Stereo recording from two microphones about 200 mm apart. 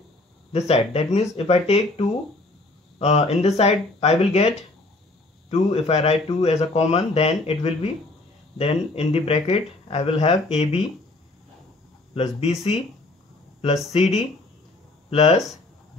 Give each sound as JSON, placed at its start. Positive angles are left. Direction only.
{"t": 0.5, "sound": "speech", "side_deg": 30}
{"t": 12.1, "sound": "speech", "side_deg": 30}
{"t": 13.9, "sound": "speech", "side_deg": 30}